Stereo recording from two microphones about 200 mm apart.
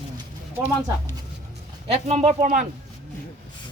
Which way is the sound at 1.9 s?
30° right (ahead or behind).